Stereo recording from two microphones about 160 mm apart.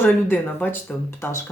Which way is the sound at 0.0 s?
10° left (ahead or behind).